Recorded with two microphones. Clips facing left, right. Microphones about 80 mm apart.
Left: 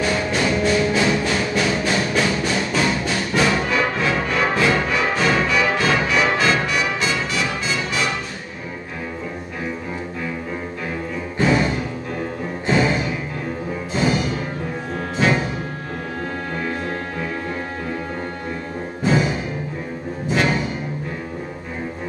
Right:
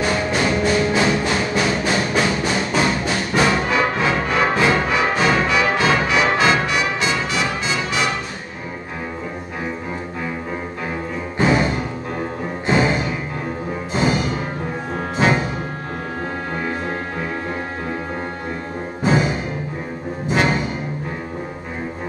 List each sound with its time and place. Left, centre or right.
0.0 s music: centre
11.3 s music: centre
19.0 s music: right